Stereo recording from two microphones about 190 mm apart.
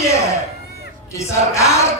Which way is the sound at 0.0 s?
15° left (ahead or behind).